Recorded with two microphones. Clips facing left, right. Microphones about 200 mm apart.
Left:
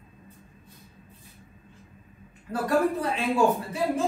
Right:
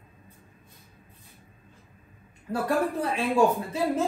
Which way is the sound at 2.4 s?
30° right (ahead or behind).